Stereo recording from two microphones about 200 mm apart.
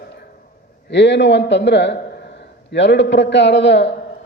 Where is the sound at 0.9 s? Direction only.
60° left (ahead or behind).